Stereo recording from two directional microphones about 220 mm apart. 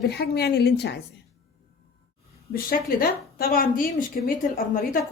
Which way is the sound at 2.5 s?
40° left (ahead or behind).